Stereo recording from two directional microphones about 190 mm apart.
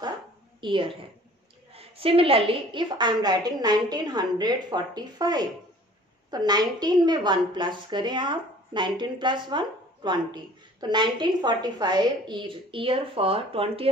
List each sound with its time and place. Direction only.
0.6 s a woman's voice: 25° right (ahead or behind)